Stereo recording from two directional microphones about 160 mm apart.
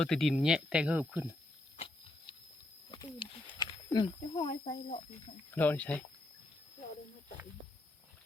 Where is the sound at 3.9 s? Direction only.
25° left (ahead or behind).